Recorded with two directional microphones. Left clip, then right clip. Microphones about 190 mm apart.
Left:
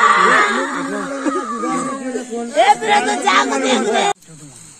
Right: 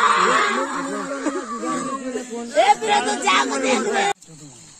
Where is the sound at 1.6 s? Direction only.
Centre (ahead or behind).